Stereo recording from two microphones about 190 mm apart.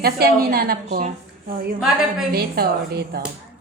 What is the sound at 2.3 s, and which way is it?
Speech, 55° right (ahead or behind).